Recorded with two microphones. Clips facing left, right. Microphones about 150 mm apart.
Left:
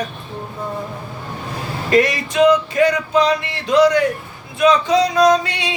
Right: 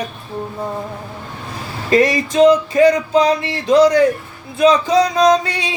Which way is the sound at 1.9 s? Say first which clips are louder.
Right 2 dB; 30° right (ahead or behind).